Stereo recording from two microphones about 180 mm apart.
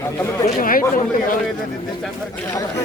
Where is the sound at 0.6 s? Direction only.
50° left (ahead or behind).